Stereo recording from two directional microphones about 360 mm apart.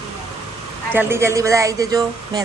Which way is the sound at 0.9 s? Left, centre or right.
Centre.